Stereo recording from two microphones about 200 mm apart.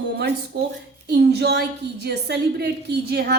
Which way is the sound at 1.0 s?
55° right (ahead or behind).